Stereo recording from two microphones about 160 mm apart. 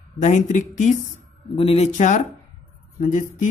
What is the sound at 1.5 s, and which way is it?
Speech, 35° left (ahead or behind).